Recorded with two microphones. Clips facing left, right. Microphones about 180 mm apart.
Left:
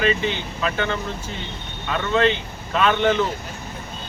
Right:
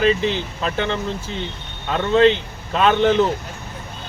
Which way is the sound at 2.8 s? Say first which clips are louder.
Right 3 dB; 35° right (ahead or behind).